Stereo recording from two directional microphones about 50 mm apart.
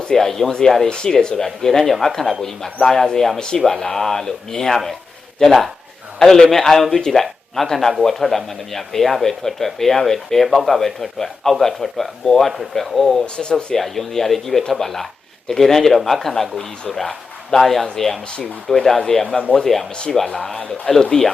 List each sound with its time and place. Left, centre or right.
0.0 s speech: centre
13.2 s speech: centre
13.7 s speech: centre